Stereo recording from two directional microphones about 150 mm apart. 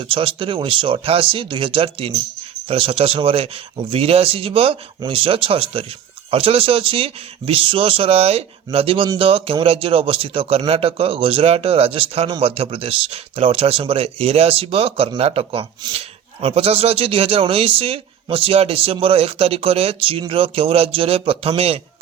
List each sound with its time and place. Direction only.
0.0 s speech: 35° right (ahead or behind)